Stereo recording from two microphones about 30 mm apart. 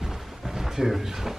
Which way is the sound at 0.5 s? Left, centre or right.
Centre.